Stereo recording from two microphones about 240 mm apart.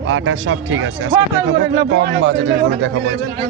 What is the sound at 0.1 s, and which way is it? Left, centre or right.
Speech, right.